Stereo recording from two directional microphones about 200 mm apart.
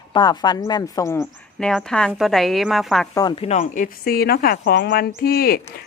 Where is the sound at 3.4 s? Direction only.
35° left (ahead or behind).